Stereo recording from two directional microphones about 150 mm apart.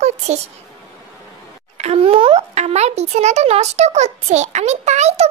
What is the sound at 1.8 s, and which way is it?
A child's voice, 40° right (ahead or behind).